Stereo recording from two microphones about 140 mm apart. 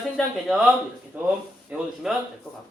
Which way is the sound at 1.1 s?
10° right (ahead or behind).